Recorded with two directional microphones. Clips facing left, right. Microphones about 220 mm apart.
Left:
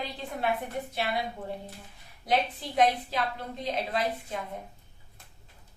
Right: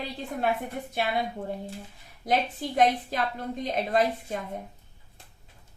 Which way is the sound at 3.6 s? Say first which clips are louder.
Right 5 dB; 45° right (ahead or behind).